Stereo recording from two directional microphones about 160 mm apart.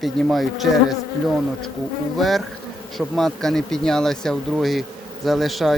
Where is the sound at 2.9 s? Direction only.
Centre (ahead or behind).